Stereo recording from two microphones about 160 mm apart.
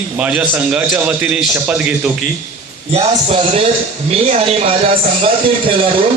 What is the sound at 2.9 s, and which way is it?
Speech, 40° right (ahead or behind).